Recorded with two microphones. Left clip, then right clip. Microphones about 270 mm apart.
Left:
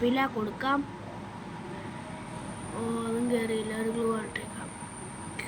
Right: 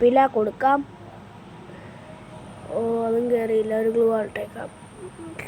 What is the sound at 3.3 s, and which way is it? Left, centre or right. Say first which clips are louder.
Speech: right 9 dB; centre.